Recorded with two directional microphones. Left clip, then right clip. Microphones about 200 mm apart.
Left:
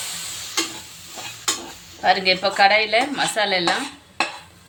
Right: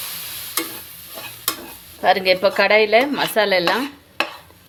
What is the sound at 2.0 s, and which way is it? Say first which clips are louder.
Speech: right 2 dB; 50° right (ahead or behind).